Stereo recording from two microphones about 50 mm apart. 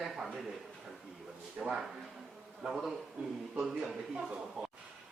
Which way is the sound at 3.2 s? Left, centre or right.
Right.